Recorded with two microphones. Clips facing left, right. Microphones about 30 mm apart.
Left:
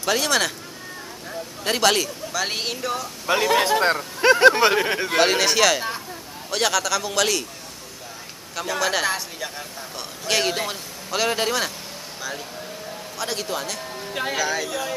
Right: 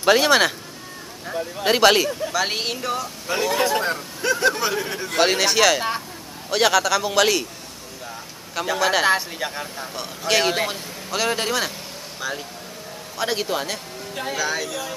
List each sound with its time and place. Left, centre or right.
0.0 s a man's voice: right
3.3 s speech: left
3.8 s speech: left
5.2 s a man's voice: centre
8.5 s a man's voice: centre
9.9 s a man's voice: centre
11.1 s speech: centre
13.2 s a man's voice: centre
14.1 s speech: centre
14.4 s speech: centre
14.7 s speech: centre